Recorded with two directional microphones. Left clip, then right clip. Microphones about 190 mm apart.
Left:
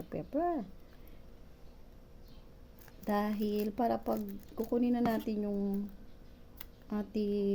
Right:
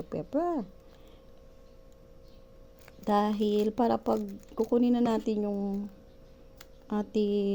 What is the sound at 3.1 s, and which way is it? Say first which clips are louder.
Speech: right 7 dB; 40° right (ahead or behind).